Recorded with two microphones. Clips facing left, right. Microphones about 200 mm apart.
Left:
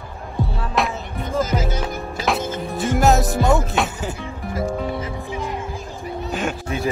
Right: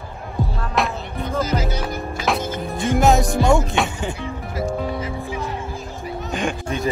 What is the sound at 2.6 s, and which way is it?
Speech, centre (ahead or behind).